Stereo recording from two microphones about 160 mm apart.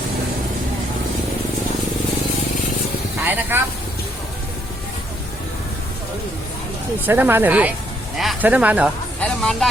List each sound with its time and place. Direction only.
3.2 s speech: 10° right (ahead or behind)
7.0 s speech: 10° right (ahead or behind)
9.2 s vehicle: 5° left (ahead or behind)